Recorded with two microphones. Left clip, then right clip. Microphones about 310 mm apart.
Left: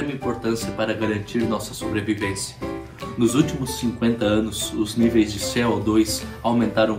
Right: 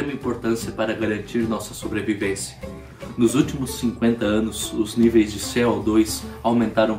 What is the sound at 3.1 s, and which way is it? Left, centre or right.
Speech, centre.